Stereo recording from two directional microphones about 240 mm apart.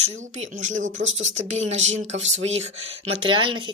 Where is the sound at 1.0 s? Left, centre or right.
Right.